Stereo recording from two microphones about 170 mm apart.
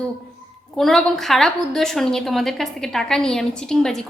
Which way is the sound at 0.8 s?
Centre (ahead or behind).